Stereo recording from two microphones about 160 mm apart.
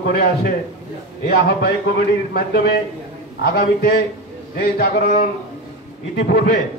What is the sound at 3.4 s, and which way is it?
A man's voice, 70° left (ahead or behind).